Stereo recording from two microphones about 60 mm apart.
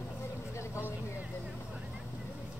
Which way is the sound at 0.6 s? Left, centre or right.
Left.